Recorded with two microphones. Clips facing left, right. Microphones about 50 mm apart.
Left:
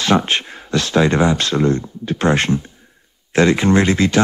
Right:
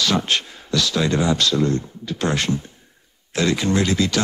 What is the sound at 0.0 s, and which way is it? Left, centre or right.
Speech, left.